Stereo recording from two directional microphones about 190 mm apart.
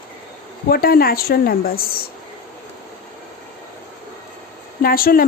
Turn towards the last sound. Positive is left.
turn(degrees=50)  # may be behind; listen again after turning